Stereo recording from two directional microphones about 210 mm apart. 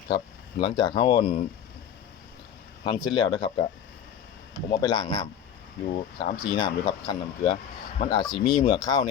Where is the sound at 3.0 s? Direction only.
20° left (ahead or behind).